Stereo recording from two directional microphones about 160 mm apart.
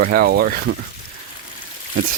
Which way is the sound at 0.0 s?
70° right (ahead or behind).